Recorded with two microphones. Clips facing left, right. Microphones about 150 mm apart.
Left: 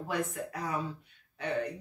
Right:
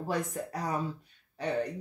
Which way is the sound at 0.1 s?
35° right (ahead or behind).